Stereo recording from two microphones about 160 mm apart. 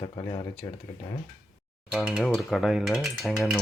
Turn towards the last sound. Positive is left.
turn(degrees=0)  # may be behind; listen again after turning